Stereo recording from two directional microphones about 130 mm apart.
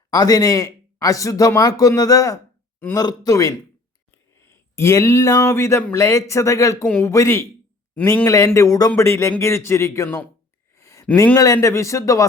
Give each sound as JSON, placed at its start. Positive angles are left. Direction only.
{"t": 0.1, "sound": "a man's voice", "side_deg": 30}
{"t": 4.8, "sound": "a man's voice", "side_deg": 20}
{"t": 10.8, "sound": "a sound", "side_deg": 20}
{"t": 11.3, "sound": "a man's voice", "side_deg": 25}